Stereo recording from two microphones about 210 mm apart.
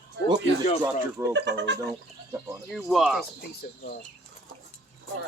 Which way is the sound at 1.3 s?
60° right (ahead or behind).